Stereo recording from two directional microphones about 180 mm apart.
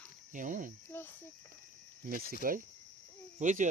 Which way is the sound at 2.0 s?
55° right (ahead or behind).